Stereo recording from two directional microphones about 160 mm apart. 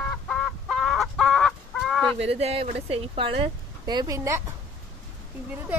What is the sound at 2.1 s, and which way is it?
Speech, 40° right (ahead or behind).